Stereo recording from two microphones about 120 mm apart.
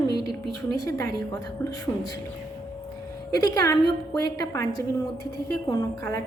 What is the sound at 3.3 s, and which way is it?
A woman's voice, 30° left (ahead or behind).